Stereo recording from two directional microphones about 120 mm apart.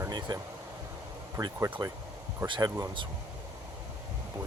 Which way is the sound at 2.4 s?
40° right (ahead or behind).